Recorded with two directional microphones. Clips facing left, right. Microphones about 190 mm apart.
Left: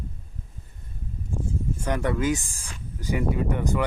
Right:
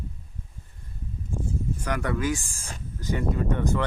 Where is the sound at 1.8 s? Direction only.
25° left (ahead or behind).